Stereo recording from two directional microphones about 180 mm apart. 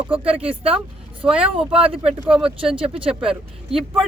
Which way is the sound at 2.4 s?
5° right (ahead or behind).